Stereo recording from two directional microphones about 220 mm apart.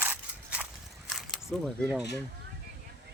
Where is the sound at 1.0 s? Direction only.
Centre (ahead or behind).